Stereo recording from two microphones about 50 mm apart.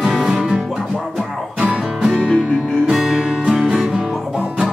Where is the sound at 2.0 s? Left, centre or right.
Centre.